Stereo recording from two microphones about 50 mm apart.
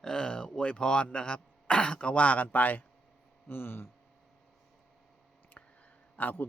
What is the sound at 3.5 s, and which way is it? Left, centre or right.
Speech, left.